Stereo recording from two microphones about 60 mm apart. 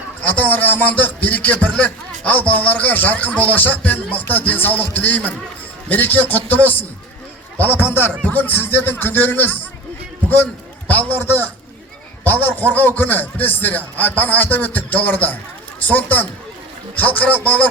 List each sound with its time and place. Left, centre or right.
0.2 s a man's voice: left
10.8 s a man's voice: left